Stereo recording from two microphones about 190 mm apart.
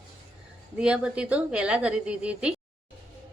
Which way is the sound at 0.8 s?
5° right (ahead or behind).